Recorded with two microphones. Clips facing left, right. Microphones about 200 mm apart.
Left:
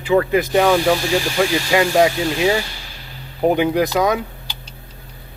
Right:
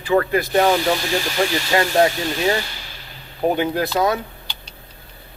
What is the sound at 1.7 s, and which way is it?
Speech, 15° left (ahead or behind).